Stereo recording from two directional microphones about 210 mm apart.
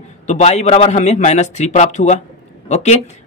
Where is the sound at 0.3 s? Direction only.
30° left (ahead or behind).